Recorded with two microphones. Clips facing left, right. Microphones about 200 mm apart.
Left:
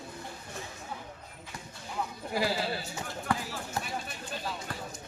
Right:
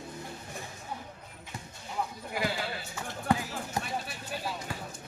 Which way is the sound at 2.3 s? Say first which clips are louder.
Left 4 dB; 35° left (ahead or behind).